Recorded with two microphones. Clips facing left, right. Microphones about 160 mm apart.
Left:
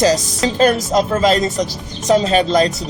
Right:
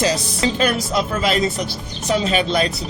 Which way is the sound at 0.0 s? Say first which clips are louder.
Left 4 dB; 40° left (ahead or behind).